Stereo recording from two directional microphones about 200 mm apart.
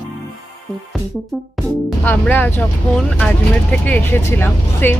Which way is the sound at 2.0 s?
10° left (ahead or behind).